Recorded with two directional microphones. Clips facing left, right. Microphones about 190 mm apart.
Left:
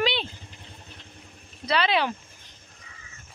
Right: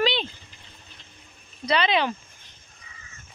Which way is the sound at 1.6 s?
5° left (ahead or behind).